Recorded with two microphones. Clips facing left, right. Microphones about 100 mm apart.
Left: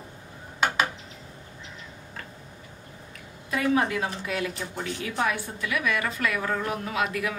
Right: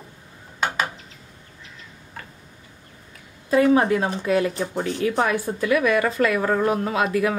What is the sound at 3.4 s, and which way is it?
A woman's voice, 35° right (ahead or behind).